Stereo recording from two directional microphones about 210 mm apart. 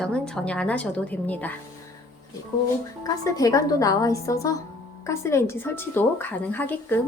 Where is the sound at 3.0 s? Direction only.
15° left (ahead or behind).